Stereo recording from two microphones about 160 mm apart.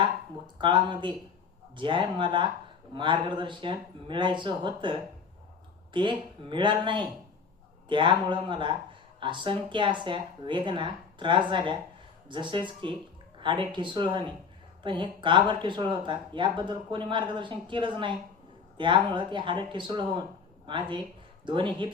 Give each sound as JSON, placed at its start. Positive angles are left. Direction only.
{"t": 0.6, "sound": "speech", "side_deg": -30}